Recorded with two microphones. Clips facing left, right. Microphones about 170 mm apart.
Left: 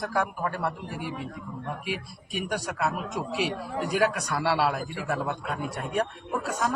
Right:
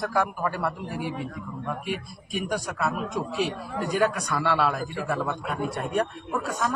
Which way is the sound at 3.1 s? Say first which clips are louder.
Right 1 dB; 10° left (ahead or behind).